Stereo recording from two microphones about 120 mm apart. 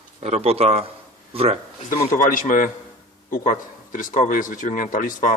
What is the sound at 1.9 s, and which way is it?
Speech, 90° left.